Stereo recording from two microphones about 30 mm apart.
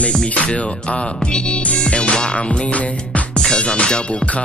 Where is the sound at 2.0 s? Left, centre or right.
Left.